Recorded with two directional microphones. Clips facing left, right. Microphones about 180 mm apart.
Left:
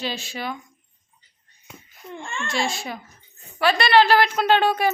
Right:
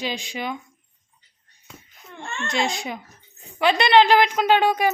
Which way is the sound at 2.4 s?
20° right (ahead or behind).